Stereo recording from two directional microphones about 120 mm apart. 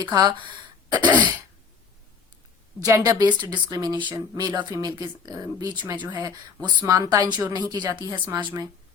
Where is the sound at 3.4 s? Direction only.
35° right (ahead or behind).